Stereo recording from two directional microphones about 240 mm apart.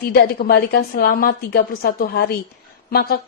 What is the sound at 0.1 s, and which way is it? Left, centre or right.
Speech, left.